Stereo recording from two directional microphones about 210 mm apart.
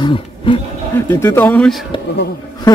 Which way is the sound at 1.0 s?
10° left (ahead or behind).